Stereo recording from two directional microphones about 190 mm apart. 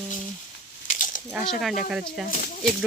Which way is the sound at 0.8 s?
45° left (ahead or behind).